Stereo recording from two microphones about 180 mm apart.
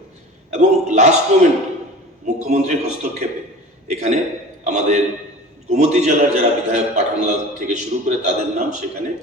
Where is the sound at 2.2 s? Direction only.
40° right (ahead or behind).